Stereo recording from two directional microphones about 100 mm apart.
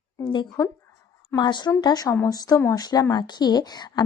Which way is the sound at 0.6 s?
40° left (ahead or behind).